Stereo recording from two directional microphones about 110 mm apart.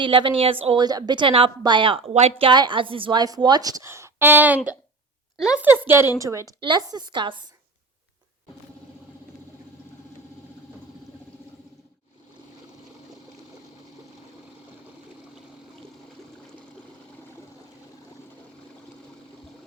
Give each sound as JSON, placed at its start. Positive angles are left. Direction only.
{"t": 0.0, "sound": "a woman's voice", "side_deg": -50}
{"t": 0.8, "sound": "a woman's voice", "side_deg": -40}
{"t": 5.6, "sound": "a woman's voice", "side_deg": -20}
{"t": 6.6, "sound": "a woman's voice", "side_deg": -40}